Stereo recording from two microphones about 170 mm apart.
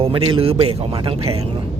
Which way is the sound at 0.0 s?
30° right (ahead or behind).